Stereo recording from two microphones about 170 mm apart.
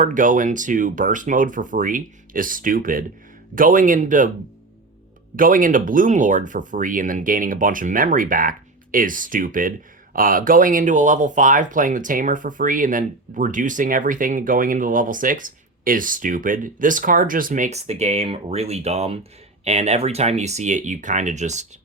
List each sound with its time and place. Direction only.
0.0 s speech: 50° right (ahead or behind)
5.4 s speech: 55° right (ahead or behind)